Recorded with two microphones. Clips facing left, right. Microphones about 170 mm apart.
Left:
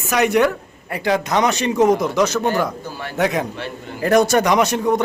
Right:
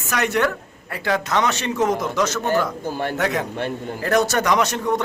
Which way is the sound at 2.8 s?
50° right (ahead or behind).